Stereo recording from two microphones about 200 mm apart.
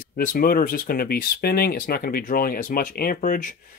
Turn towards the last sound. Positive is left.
turn(degrees=40)  # may be behind; listen again after turning